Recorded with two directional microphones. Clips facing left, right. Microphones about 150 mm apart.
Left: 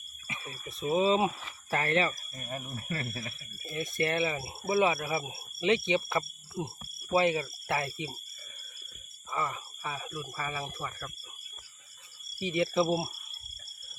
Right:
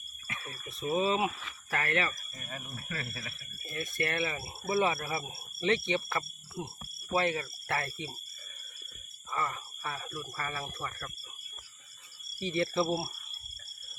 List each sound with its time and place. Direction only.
0.3 s speech: 20° left (ahead or behind); by 3.1 s 35° left (ahead or behind)
3.1 s speech: 20° left (ahead or behind)
9.3 s speech: 10° left (ahead or behind)
12.4 s speech: 15° left (ahead or behind)